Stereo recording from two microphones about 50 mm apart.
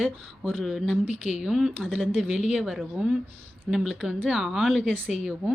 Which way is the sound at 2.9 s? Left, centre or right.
Centre.